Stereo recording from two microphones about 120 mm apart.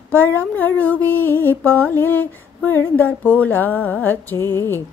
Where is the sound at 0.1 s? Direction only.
15° left (ahead or behind).